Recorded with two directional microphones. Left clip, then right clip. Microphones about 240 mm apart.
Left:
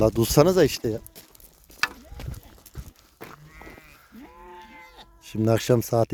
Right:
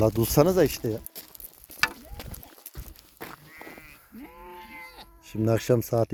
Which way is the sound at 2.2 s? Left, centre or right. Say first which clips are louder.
Left 1 dB; right.